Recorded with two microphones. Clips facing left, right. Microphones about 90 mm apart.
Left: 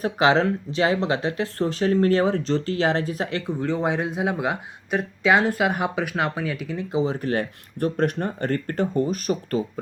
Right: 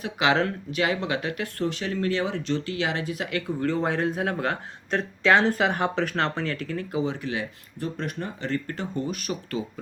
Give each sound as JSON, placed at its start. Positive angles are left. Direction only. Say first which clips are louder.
{"t": 0.0, "sound": "speech", "louder": "left 4 dB", "side_deg": 35}
{"t": 3.6, "sound": "speech", "louder": "left 1 dB", "side_deg": 15}
{"t": 6.9, "sound": "speech", "louder": "left 6 dB", "side_deg": 35}